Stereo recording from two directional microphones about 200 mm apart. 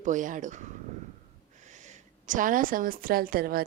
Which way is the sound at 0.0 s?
40° right (ahead or behind).